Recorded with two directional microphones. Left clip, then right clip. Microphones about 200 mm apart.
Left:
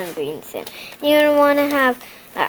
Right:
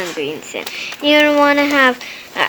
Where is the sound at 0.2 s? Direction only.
25° left (ahead or behind).